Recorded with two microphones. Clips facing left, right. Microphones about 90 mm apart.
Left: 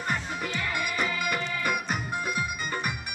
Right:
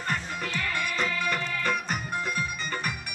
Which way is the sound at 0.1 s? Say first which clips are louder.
Even; 15° left (ahead or behind).